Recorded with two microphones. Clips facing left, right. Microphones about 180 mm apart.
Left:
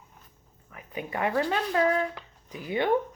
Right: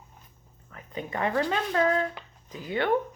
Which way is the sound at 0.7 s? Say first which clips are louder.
Even; 10° left (ahead or behind).